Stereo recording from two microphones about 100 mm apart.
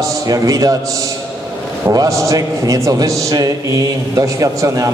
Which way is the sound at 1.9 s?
35° right (ahead or behind).